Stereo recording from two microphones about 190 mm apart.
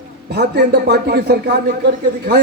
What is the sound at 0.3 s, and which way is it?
A man's voice, 60° right (ahead or behind).